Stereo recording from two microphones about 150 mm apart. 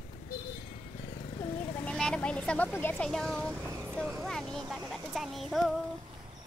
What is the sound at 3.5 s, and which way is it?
Vehicle, 15° right (ahead or behind).